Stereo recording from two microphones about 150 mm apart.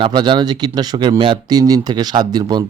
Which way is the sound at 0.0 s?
30° right (ahead or behind).